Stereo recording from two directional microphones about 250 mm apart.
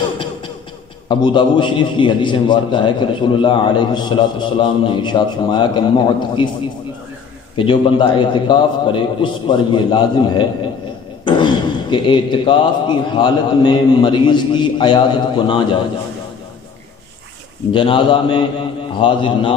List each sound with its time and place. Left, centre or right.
1.0 s a man's voice: centre
7.5 s a man's voice: left
17.7 s a man's voice: centre